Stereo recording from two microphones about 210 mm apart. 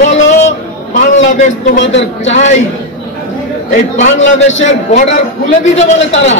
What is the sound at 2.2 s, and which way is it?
Speech, 35° left (ahead or behind).